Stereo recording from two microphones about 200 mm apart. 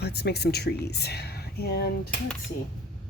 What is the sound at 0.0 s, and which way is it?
Speech, 55° left (ahead or behind).